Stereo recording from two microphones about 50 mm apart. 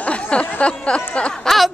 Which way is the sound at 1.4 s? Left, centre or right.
Centre.